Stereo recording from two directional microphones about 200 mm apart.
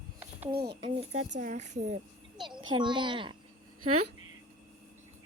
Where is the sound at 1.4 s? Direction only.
35° right (ahead or behind).